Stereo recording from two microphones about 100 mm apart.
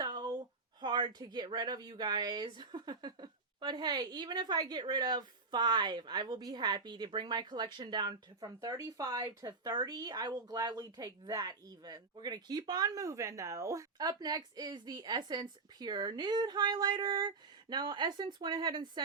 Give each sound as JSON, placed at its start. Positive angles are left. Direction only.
{"t": 0.0, "sound": "speech", "side_deg": -45}